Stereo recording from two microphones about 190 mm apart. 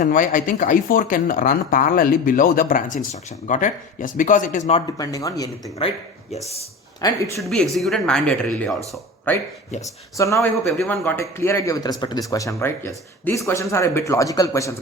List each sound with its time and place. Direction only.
0.0 s speech: 45° left (ahead or behind)
4.9 s speech: 20° left (ahead or behind)
6.3 s speech: 35° left (ahead or behind)
7.0 s speech: 15° left (ahead or behind)
7.4 s speech: centre (ahead or behind)
10.2 s speech: 15° left (ahead or behind)